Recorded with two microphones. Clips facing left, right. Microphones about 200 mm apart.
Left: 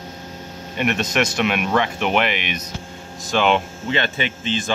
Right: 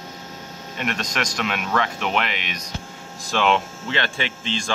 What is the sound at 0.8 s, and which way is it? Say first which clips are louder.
Speech: left 6 dB; 5° left (ahead or behind).